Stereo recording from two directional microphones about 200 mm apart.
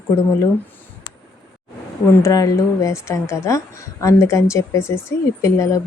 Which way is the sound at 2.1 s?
15° left (ahead or behind).